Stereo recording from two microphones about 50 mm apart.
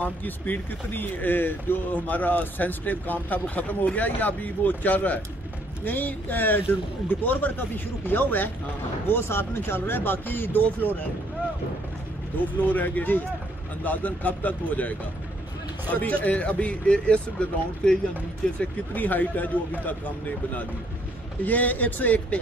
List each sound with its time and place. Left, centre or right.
0.0 s speech: left
9.1 s speech: left
12.6 s speech: left; by 18.0 s centre
18.9 s speech: left